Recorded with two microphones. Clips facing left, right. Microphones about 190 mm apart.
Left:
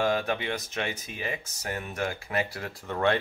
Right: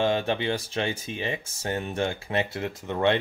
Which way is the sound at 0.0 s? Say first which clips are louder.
Right 2 dB; 25° right (ahead or behind).